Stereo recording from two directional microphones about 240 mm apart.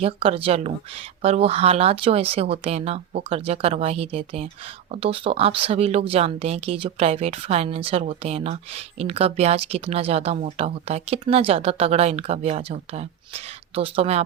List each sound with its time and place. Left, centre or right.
0.0 s speech: right